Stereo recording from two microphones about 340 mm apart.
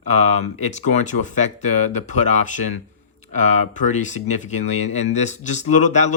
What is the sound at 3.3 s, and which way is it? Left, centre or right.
Speech, left.